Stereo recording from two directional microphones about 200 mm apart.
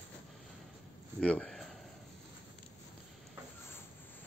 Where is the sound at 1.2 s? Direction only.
5° left (ahead or behind).